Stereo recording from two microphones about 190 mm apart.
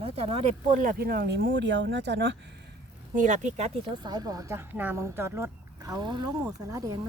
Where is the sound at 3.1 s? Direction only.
40° right (ahead or behind).